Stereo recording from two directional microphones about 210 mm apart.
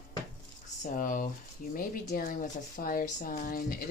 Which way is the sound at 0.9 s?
40° left (ahead or behind).